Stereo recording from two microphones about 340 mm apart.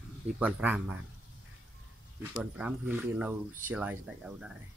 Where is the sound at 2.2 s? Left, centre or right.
Centre.